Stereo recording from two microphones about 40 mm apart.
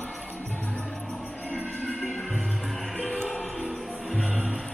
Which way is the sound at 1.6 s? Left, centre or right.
Left.